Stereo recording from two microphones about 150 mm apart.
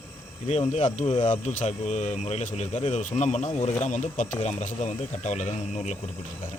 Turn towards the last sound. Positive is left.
turn(degrees=50)  # may be behind; listen again after turning